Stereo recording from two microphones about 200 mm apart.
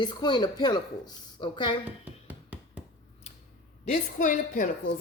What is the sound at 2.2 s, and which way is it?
Music, 10° right (ahead or behind).